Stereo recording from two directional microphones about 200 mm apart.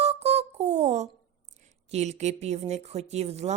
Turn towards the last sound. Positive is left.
turn(degrees=-30)  # may be behind; listen again after turning